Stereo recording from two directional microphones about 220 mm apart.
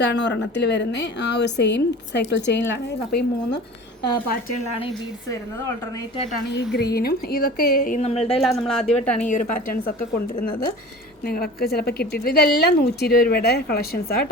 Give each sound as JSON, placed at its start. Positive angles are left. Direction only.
{"t": 0.0, "sound": "a woman's voice", "side_deg": 50}
{"t": 6.5, "sound": "a woman's voice", "side_deg": 50}
{"t": 8.4, "sound": "speech", "side_deg": 0}
{"t": 9.1, "sound": "a woman's voice", "side_deg": 35}
{"t": 11.3, "sound": "a woman's voice", "side_deg": 45}